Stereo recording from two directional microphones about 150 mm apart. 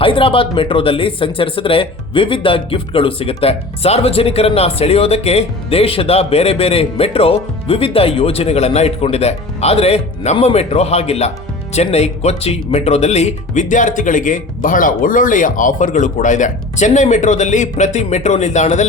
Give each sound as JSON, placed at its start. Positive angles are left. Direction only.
{"t": 0.0, "sound": "speech", "side_deg": 35}